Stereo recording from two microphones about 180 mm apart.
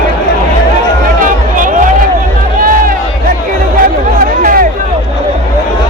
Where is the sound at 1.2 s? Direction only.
45° right (ahead or behind).